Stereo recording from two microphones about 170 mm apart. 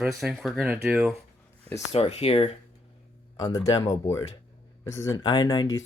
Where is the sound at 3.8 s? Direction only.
40° left (ahead or behind).